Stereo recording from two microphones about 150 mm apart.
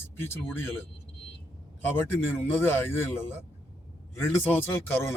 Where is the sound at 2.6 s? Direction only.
15° left (ahead or behind).